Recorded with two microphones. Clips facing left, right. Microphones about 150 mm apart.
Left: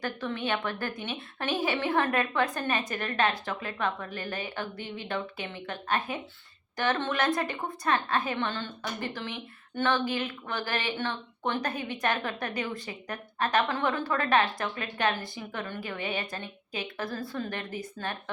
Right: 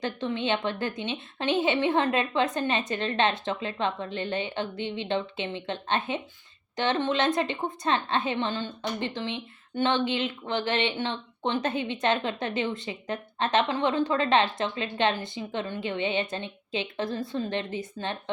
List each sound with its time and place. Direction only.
0.0 s a woman's voice: 20° right (ahead or behind)